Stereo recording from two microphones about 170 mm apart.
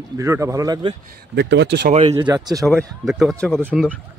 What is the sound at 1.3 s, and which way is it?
Speech, 85° right.